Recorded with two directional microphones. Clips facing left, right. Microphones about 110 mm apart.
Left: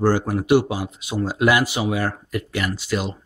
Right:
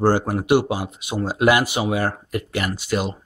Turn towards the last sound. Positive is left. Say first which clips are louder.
# right 1 dB
turn(degrees=-50)  # may be behind; listen again after turning